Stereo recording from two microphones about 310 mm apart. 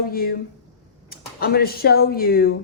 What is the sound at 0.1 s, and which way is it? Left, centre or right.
Speech, left.